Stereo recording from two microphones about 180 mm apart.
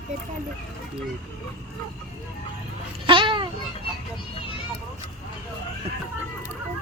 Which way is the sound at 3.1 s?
25° right (ahead or behind).